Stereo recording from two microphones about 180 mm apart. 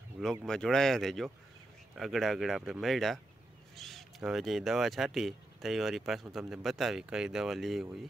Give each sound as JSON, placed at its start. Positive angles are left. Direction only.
{"t": 0.5, "sound": "speech", "side_deg": 5}